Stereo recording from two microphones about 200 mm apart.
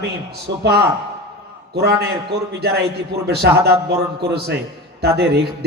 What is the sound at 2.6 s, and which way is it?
A man's voice, 55° right (ahead or behind).